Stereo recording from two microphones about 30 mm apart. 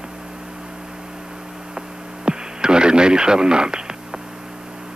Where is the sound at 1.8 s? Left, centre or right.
Right.